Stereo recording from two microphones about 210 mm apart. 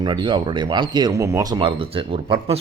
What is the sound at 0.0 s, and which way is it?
Speech, 20° right (ahead or behind).